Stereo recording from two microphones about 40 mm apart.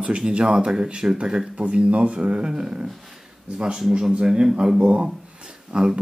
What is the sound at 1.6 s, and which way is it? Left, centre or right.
Speech, right.